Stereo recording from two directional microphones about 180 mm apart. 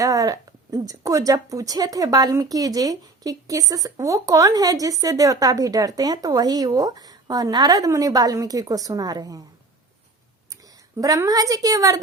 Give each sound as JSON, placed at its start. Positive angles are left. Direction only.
{"t": 0.0, "sound": "a woman's voice", "side_deg": -20}
{"t": 10.5, "sound": "speech", "side_deg": -20}